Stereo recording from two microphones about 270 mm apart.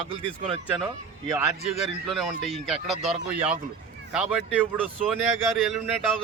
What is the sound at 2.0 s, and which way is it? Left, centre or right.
A man's voice, centre.